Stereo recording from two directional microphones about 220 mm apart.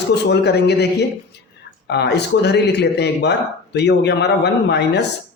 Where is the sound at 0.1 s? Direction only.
50° left (ahead or behind).